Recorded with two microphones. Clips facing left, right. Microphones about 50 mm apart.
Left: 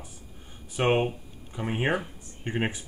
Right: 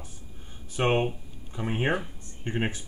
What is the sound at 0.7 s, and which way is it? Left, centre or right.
Speech, centre.